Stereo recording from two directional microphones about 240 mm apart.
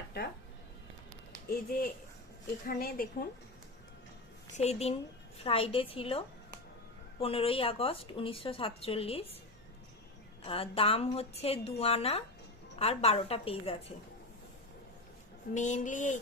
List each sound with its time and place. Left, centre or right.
2.6 s speech: left
4.5 s a woman's voice: left
10.4 s a woman's voice: left
15.5 s speech: left